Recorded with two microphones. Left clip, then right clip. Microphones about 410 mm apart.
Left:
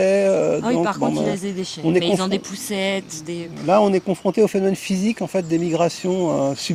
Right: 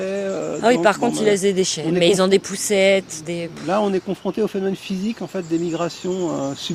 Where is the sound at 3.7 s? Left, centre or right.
Left.